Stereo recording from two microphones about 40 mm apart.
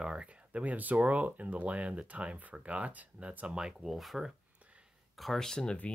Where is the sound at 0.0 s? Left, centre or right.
Right.